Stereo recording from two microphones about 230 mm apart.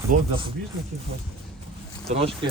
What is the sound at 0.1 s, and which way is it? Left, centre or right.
Speech, right.